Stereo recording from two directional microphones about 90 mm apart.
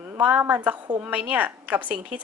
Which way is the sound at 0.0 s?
15° right (ahead or behind).